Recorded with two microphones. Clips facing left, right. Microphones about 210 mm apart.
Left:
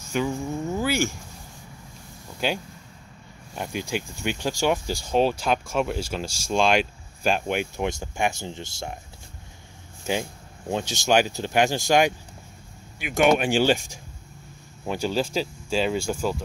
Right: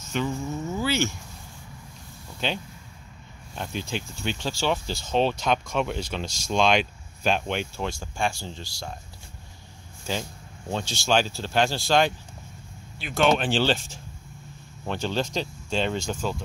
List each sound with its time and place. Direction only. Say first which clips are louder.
0.0 s cricket: left 2 dB; 10° left (ahead or behind)
2.4 s speech: left 3 dB; 5° left (ahead or behind)
10.1 s speech: left 4 dB; 20° left (ahead or behind)